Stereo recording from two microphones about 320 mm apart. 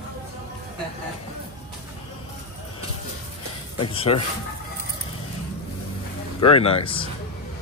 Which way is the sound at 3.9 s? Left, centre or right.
Centre.